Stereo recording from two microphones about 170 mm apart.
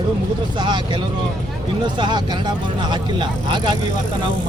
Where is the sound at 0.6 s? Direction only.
25° right (ahead or behind).